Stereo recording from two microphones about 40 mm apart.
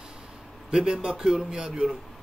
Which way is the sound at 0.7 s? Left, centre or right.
Right.